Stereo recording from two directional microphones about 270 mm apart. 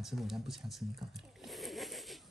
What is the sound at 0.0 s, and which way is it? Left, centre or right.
A child's voice, centre.